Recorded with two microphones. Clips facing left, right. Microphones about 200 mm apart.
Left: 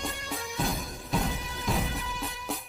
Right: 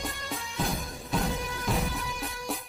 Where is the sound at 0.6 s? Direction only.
Centre (ahead or behind).